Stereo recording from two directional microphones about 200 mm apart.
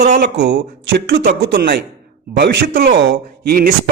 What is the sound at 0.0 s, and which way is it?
A man's voice, 45° right (ahead or behind).